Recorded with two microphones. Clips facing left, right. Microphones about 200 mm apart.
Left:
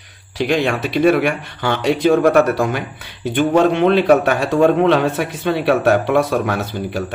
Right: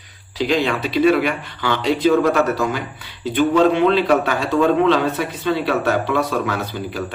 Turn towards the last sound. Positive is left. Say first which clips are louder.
# left 3 dB
turn(degrees=45)  # may be behind; listen again after turning